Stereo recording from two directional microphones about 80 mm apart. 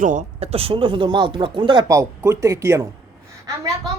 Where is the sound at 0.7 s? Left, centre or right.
Right.